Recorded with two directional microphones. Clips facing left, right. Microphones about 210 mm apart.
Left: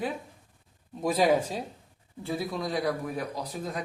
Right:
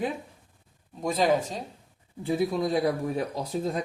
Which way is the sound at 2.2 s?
20° right (ahead or behind).